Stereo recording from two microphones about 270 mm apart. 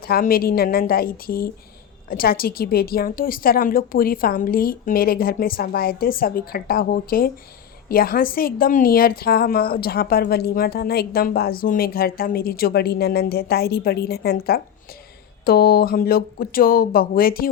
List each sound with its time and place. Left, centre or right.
0.0 s a woman's voice: left